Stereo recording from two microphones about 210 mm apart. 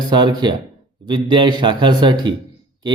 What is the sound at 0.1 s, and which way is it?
Speech, 20° right (ahead or behind).